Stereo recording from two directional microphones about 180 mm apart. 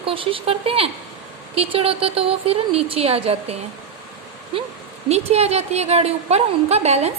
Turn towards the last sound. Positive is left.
turn(degrees=-35)  # may be behind; listen again after turning